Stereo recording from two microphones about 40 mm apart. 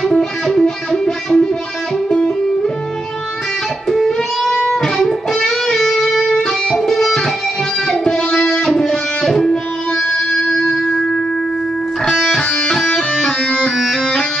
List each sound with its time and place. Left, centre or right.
0.0 s music: centre
3.9 s music: centre
6.8 s music: centre
9.5 s music: left
12.0 s music: centre
12.4 s music: left